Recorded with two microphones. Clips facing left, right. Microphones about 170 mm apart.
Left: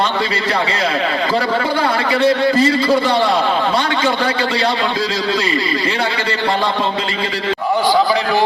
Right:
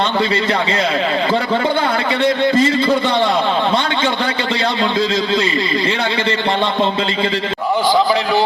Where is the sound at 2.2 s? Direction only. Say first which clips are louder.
Left 1 dB; 30° left (ahead or behind).